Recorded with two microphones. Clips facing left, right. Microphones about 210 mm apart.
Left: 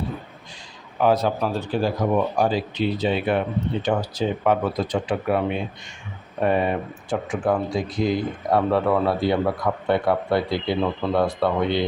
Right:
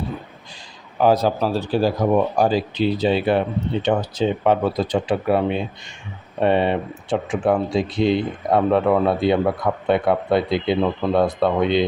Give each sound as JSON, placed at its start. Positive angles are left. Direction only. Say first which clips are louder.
{"t": 0.9, "sound": "speech", "louder": "right 3 dB", "side_deg": -35}